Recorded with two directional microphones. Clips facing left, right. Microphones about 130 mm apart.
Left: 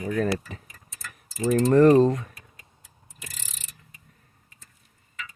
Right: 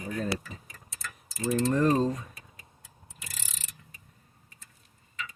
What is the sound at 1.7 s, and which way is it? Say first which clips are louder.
Speech: left 11 dB; 80° left.